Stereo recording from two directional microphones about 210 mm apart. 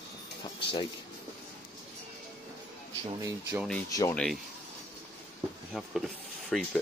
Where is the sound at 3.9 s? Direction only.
15° left (ahead or behind).